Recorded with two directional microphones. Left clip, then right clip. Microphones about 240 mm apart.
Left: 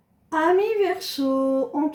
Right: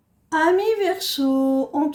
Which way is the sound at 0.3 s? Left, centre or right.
Right.